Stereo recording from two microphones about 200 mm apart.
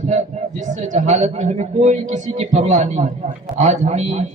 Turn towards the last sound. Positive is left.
turn(degrees=-35)  # may be behind; listen again after turning